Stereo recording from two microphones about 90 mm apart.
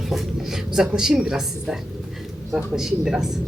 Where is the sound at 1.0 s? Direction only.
5° right (ahead or behind).